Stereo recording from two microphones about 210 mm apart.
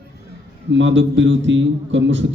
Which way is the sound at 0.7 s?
60° right (ahead or behind).